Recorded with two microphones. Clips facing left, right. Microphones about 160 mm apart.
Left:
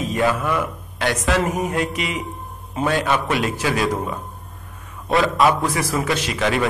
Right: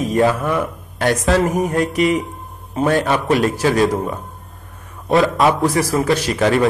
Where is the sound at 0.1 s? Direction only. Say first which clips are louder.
Right 4 dB; 35° right (ahead or behind).